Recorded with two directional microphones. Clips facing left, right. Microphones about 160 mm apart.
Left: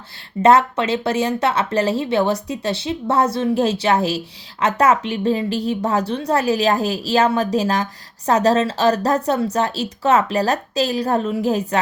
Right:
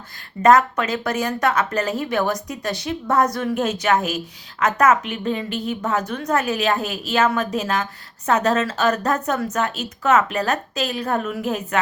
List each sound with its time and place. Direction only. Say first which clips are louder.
0.4 s a woman's voice: left 1 dB; 30° left (ahead or behind)